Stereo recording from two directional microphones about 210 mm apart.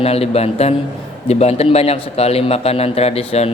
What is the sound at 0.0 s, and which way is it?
A man's voice, 30° left (ahead or behind).